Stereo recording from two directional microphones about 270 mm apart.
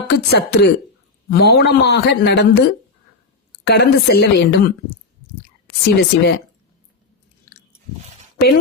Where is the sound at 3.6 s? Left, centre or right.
Left.